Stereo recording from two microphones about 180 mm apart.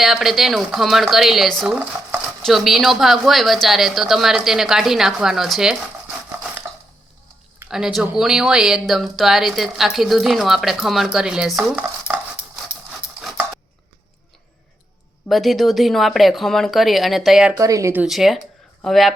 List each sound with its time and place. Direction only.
0.0 s stir: centre (ahead or behind)
7.7 s stir: 5° right (ahead or behind)
15.3 s stir: centre (ahead or behind)
17.6 s speech: 20° right (ahead or behind)
18.0 s speech: centre (ahead or behind)